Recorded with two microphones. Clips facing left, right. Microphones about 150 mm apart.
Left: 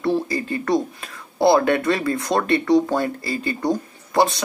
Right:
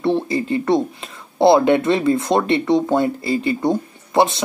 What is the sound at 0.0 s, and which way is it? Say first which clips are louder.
Speech: right 3 dB; 25° right (ahead or behind).